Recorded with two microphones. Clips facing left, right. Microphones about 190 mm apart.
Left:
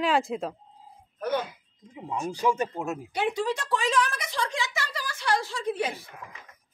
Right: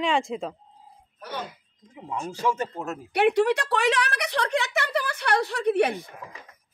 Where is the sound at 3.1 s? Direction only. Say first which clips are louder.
Right 9 dB; 65° right (ahead or behind).